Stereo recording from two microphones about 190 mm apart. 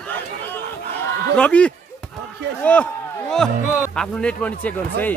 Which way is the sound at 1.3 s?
5° left (ahead or behind).